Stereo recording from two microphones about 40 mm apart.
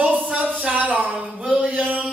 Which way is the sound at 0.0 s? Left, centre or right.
Right.